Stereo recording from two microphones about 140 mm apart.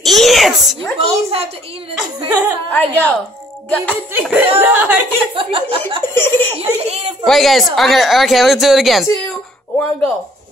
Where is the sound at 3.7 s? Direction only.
10° left (ahead or behind).